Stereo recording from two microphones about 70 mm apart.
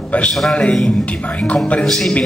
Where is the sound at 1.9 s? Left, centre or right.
Centre.